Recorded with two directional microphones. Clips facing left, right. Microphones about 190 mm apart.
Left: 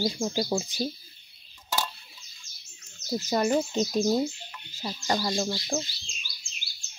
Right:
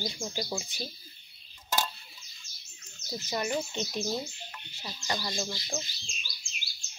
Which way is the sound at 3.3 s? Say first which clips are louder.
Left 7 dB; 40° left (ahead or behind).